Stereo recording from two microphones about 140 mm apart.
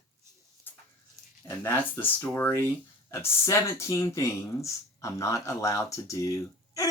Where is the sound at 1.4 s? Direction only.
20° left (ahead or behind).